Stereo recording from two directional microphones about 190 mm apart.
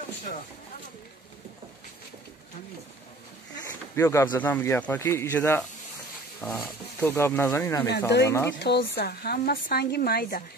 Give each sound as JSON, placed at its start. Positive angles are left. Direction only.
{"t": 3.5, "sound": "speech", "side_deg": 15}
{"t": 8.5, "sound": "speech", "side_deg": 60}